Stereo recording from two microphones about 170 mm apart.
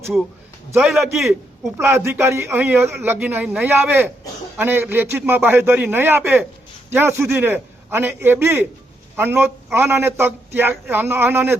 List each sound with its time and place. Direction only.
0.7 s a man's voice: 5° right (ahead or behind)
1.8 s speech: 15° right (ahead or behind)